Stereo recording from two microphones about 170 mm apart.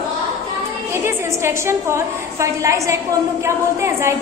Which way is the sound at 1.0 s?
15° right (ahead or behind).